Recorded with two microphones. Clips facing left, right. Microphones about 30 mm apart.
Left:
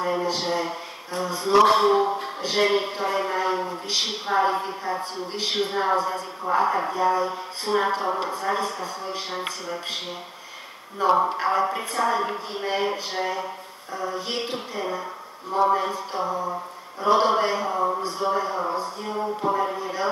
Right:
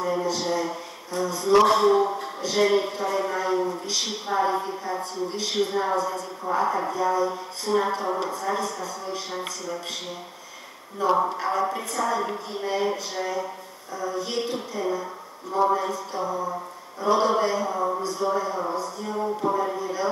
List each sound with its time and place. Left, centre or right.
0.0 s a sound: left
1.7 s speech: left
11.2 s speech: left